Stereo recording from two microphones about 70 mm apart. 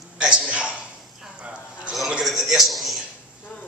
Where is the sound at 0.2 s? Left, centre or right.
Centre.